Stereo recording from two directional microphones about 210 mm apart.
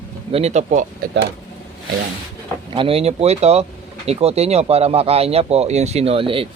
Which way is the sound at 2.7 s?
25° right (ahead or behind).